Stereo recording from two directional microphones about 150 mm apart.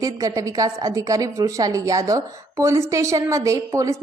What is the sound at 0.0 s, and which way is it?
A woman's voice, 25° right (ahead or behind).